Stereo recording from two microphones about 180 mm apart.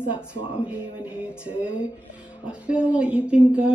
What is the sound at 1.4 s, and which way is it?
A woman's voice, 5° right (ahead or behind).